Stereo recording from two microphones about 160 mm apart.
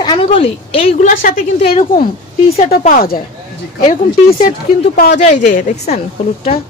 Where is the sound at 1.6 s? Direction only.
40° left (ahead or behind).